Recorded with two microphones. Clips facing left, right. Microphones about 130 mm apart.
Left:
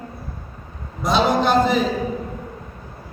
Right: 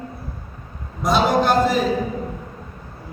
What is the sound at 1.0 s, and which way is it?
Speech, 45° right (ahead or behind).